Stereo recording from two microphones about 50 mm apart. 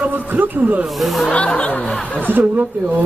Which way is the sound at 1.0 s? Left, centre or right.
Centre.